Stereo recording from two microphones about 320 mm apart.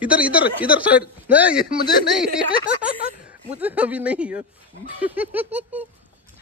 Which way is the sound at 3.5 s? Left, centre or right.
Centre.